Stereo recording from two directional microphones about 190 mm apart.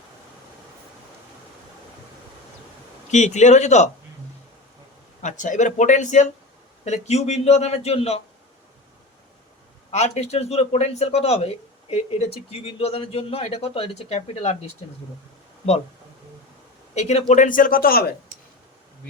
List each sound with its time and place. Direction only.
3.1 s speech: 40° left (ahead or behind)
5.2 s speech: 40° left (ahead or behind)
9.9 s speech: 35° left (ahead or behind)
16.9 s speech: 35° left (ahead or behind); by 18.1 s 50° left (ahead or behind)